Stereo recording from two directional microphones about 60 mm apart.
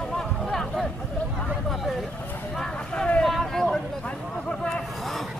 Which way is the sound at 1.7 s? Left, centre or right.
Centre.